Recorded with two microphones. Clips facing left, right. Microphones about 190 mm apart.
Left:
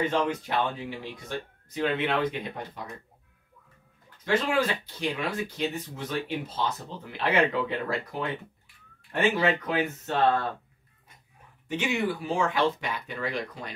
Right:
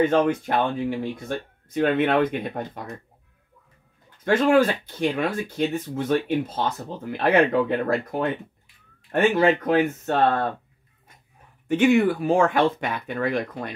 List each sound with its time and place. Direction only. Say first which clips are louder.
0.1 s speech: right 6 dB; 50° right (ahead or behind)
4.2 s speech: right 7 dB; 50° right (ahead or behind)
11.6 s speech: right 10 dB; 55° right (ahead or behind)